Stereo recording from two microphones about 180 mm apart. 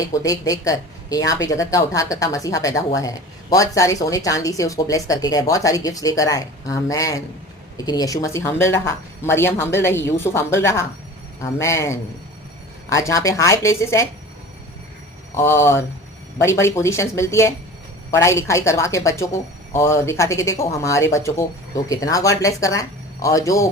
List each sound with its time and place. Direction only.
0.0 s speech: 20° left (ahead or behind)
15.4 s speech: 15° left (ahead or behind)